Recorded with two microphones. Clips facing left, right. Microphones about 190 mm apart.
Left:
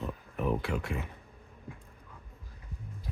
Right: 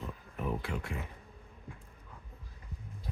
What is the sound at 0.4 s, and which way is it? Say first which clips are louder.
Speech: left 5 dB; 70° left (ahead or behind).